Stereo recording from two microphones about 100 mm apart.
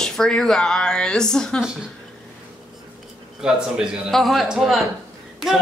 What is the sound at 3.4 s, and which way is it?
A man's voice, 10° right (ahead or behind).